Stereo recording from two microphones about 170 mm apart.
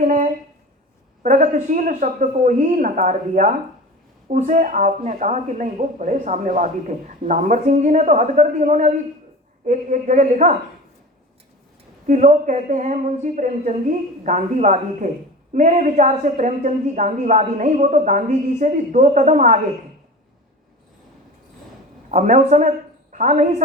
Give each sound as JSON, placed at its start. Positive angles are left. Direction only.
{"t": 0.0, "sound": "a sound", "side_deg": -50}
{"t": 1.2, "sound": "a woman's voice", "side_deg": -45}
{"t": 12.0, "sound": "a woman's voice", "side_deg": -45}
{"t": 22.1, "sound": "a woman's voice", "side_deg": -45}